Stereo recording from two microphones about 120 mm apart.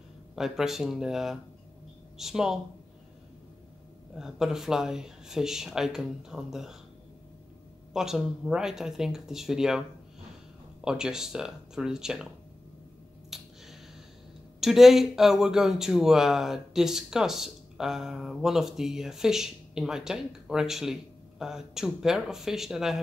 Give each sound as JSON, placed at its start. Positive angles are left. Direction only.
{"t": 0.4, "sound": "speech", "side_deg": -5}
{"t": 4.2, "sound": "speech", "side_deg": -5}
{"t": 7.9, "sound": "speech", "side_deg": -5}
{"t": 13.3, "sound": "finger snapping", "side_deg": 0}
{"t": 14.6, "sound": "speech", "side_deg": 0}